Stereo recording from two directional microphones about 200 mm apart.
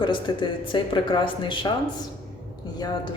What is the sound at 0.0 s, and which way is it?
Speech, 25° left (ahead or behind).